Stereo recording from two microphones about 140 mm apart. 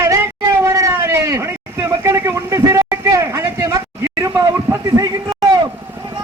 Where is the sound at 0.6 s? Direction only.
20° right (ahead or behind).